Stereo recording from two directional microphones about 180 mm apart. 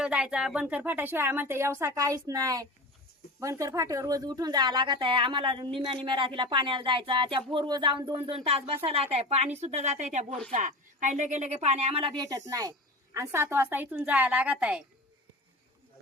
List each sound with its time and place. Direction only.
0.0 s a woman's voice: 5° right (ahead or behind)